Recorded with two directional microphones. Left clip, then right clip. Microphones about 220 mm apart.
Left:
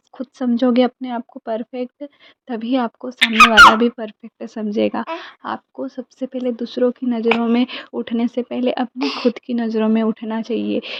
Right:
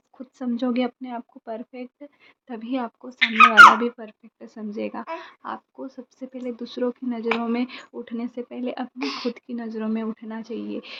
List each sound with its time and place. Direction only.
0.2 s a woman's voice: 30° left (ahead or behind)
3.2 s speech: 40° left (ahead or behind)